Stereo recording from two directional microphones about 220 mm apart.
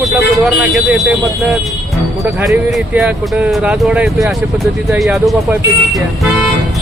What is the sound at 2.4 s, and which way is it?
Speech, centre (ahead or behind).